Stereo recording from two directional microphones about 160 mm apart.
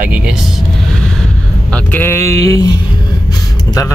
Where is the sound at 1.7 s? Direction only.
10° left (ahead or behind).